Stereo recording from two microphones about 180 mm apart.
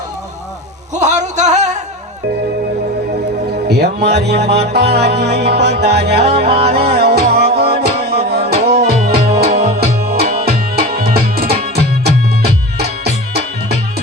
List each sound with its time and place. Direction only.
0.9 s a sound: 40° right (ahead or behind)
3.7 s music: 65° right (ahead or behind)
9.0 s music: 35° right (ahead or behind)
9.4 s music: 60° right (ahead or behind)